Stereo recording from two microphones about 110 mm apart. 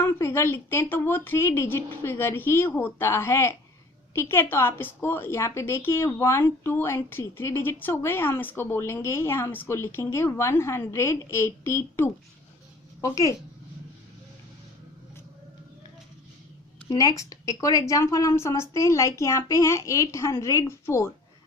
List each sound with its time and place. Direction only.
0.0 s a woman's voice: 25° left (ahead or behind)
16.9 s a woman's voice: 35° left (ahead or behind)